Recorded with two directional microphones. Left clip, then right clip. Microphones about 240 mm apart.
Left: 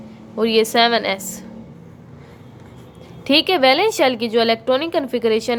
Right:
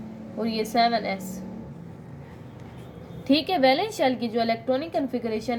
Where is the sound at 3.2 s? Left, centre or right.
Left.